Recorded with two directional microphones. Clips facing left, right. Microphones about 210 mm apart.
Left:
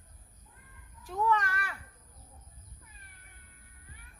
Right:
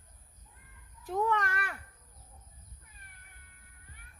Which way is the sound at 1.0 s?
55° right (ahead or behind).